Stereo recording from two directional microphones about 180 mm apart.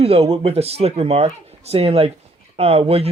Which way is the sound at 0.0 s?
35° right (ahead or behind).